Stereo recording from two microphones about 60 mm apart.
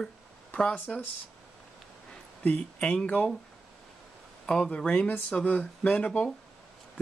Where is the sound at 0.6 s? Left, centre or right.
Centre.